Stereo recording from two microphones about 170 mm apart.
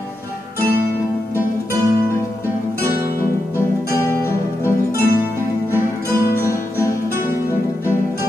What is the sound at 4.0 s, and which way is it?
Music, 15° left (ahead or behind).